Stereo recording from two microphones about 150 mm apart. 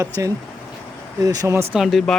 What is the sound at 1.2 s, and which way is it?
Speech, 25° right (ahead or behind).